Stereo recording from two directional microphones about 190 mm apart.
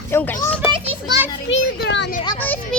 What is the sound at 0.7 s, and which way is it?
Children playing, 25° right (ahead or behind).